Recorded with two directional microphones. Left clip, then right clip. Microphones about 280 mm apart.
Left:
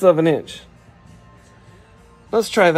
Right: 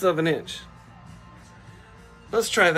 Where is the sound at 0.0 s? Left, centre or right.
Centre.